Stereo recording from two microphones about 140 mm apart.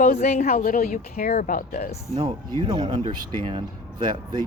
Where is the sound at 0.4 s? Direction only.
90° left.